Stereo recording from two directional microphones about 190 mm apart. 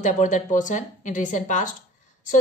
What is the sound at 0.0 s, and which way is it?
A woman's voice, 40° left (ahead or behind).